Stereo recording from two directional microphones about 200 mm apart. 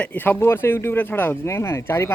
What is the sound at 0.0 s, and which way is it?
Speech, 10° left (ahead or behind).